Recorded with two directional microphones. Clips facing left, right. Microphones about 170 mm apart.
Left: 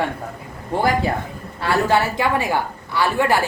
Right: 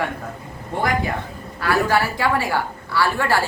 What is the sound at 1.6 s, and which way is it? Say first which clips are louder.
A woman's voice: left 1 dB; 25° left (ahead or behind).